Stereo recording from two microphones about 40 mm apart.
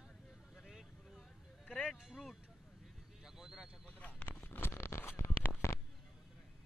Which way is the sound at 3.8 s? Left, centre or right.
Left.